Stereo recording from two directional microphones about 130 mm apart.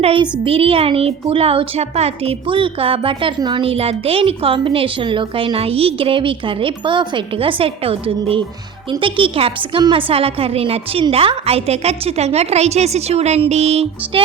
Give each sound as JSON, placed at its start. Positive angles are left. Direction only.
{"t": 0.0, "sound": "a child's voice", "side_deg": -45}